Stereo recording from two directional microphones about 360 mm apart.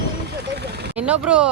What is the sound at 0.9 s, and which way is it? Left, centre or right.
Speech, centre.